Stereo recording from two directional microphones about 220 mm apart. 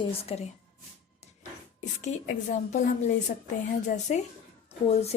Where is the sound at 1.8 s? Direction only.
30° left (ahead or behind).